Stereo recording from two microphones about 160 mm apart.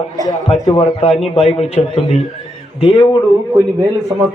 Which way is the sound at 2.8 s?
30° left (ahead or behind).